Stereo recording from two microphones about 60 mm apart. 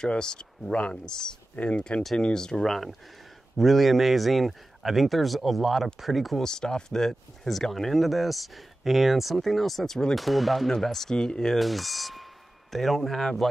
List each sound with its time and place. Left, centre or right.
0.0 s speech: centre
6.4 s speech: centre